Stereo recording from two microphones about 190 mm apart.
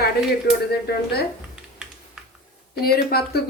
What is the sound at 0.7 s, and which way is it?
Speech, 60° left (ahead or behind).